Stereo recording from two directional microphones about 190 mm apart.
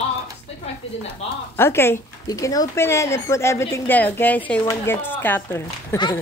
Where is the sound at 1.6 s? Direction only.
10° left (ahead or behind).